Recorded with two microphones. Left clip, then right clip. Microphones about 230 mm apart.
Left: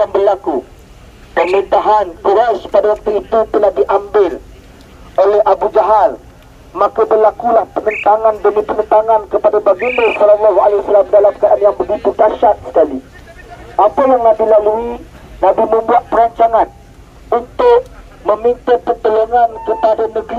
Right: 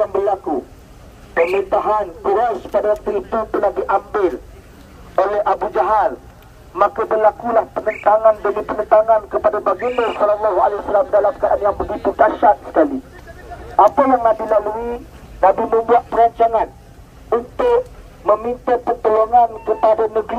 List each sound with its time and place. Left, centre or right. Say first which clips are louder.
0.0 s speech: left 6 dB; centre
1.5 s speech: left 6 dB; centre
5.1 s music: left 6 dB; centre
6.7 s speech: left 5 dB; left
15.4 s music: left 3 dB; left
18.2 s music: left 4 dB; centre